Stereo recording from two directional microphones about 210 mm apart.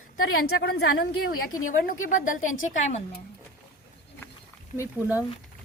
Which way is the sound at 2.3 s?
70° left (ahead or behind).